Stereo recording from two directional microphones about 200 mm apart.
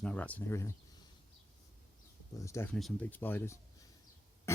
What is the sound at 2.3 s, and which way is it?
Speech, 15° left (ahead or behind).